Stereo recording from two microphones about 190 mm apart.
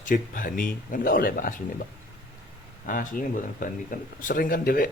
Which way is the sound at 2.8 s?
45° left (ahead or behind).